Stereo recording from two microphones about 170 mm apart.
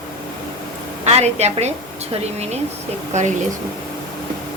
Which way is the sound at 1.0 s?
40° right (ahead or behind).